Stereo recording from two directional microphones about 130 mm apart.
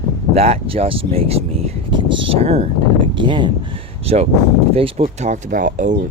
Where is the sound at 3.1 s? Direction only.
35° right (ahead or behind).